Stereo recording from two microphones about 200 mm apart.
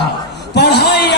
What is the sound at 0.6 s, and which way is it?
Speech, 55° left (ahead or behind).